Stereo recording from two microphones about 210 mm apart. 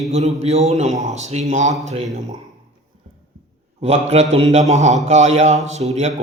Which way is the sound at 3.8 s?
30° right (ahead or behind).